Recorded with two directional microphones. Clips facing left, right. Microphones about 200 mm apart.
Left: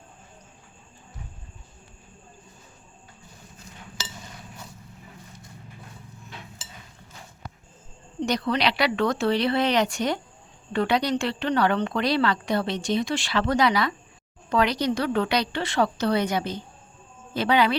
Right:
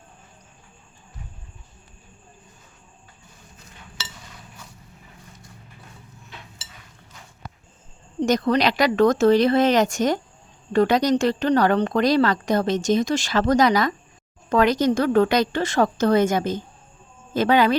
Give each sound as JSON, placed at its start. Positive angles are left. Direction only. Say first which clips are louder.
{"t": 8.2, "sound": "a woman's voice", "louder": "right 5 dB", "side_deg": -45}